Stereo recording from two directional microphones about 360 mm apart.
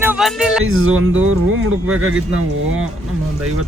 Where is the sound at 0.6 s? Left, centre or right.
Right.